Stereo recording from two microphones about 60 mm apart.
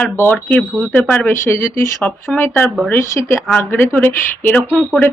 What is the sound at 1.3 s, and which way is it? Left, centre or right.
Speech, left.